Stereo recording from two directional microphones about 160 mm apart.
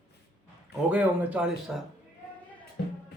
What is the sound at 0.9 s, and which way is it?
Speech, 10° right (ahead or behind).